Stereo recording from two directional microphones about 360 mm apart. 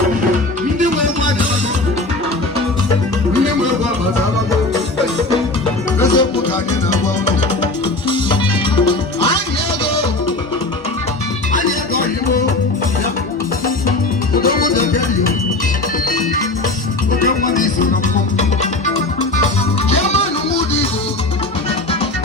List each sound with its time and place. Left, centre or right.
6.0 s music: centre
14.3 s music: left
17.2 s music: left